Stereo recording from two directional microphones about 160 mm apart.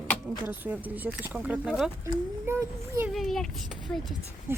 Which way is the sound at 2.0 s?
15° right (ahead or behind).